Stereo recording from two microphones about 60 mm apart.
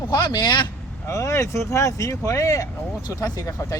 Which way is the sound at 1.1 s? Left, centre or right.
Left.